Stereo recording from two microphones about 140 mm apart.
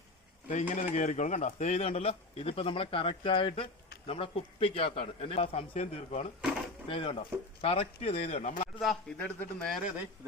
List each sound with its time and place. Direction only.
0.7 s speech: 60° left (ahead or behind)
6.8 s speech: 40° left (ahead or behind); by 8.6 s 55° left (ahead or behind)
8.8 s a man's voice: centre (ahead or behind)